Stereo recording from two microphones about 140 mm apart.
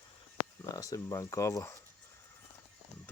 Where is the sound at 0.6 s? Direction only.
25° left (ahead or behind).